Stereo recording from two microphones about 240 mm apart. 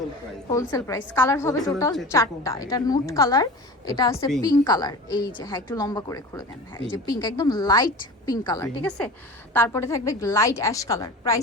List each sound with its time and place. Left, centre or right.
0.7 s a woman's voice: centre